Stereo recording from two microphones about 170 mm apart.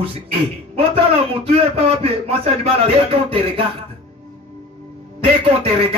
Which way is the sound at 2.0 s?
35° right (ahead or behind).